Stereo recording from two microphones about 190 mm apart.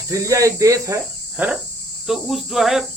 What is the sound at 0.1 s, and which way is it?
Speech, 15° right (ahead or behind).